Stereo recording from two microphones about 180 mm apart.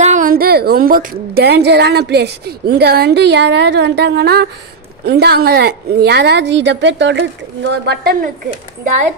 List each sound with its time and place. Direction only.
0.0 s a woman's voice: 45° right (ahead or behind)